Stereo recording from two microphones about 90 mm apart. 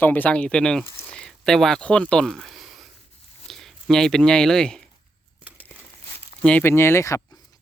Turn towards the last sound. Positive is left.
turn(degrees=35)  # may be behind; listen again after turning